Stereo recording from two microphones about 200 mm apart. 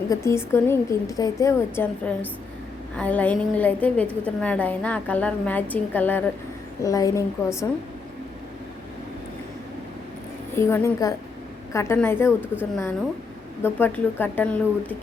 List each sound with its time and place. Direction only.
0.1 s a woman's voice: 15° left (ahead or behind)
10.5 s a woman's voice: 10° left (ahead or behind)
13.6 s a woman's voice: 10° left (ahead or behind)